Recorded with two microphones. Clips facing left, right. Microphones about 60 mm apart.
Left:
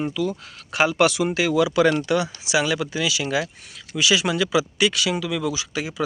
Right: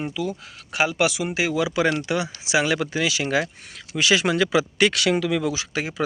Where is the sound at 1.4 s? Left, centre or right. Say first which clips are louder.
Left 3 dB; right.